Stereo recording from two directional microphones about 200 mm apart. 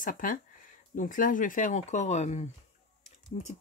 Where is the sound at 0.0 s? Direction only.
40° left (ahead or behind).